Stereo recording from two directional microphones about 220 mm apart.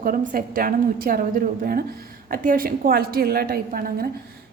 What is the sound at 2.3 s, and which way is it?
A woman's voice, 40° right (ahead or behind).